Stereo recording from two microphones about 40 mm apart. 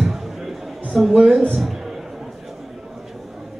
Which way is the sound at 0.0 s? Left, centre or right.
Centre.